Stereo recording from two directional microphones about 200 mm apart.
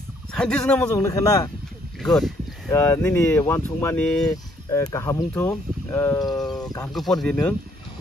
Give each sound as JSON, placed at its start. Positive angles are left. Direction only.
{"t": 0.3, "sound": "speech", "side_deg": 5}
{"t": 0.9, "sound": "speech", "side_deg": 15}
{"t": 2.0, "sound": "a sound", "side_deg": 0}
{"t": 2.7, "sound": "speech", "side_deg": 10}
{"t": 4.6, "sound": "speech", "side_deg": 15}
{"t": 6.1, "sound": "speech", "side_deg": 20}
{"t": 6.8, "sound": "speech", "side_deg": 0}